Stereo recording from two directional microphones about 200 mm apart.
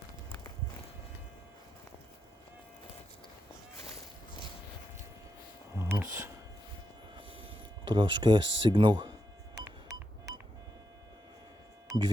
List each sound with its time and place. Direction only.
5.8 s a sound: 10° right (ahead or behind)
7.9 s speech: 25° right (ahead or behind)
9.6 s music: 15° right (ahead or behind)
11.9 s music: 25° right (ahead or behind)